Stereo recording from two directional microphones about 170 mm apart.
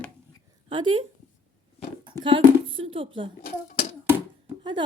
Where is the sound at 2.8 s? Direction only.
30° right (ahead or behind).